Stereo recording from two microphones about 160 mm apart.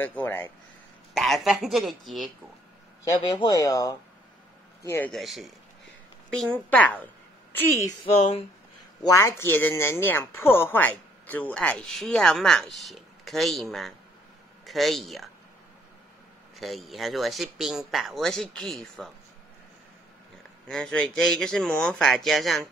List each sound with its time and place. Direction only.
0.0 s a woman's voice: 10° left (ahead or behind)
1.1 s speech: centre (ahead or behind)
3.3 s a woman's voice: 25° left (ahead or behind)
5.1 s a woman's voice: centre (ahead or behind)
8.2 s speech: 35° left (ahead or behind)
9.0 s speech: 15° left (ahead or behind); by 15.3 s centre (ahead or behind)
16.5 s speech: centre (ahead or behind)
20.6 s speech: 5° left (ahead or behind)